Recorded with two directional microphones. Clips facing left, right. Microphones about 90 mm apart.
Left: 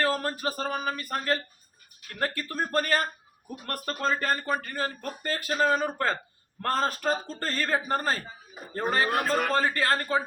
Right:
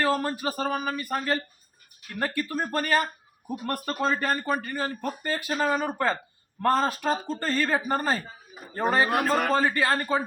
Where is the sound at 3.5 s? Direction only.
25° right (ahead or behind).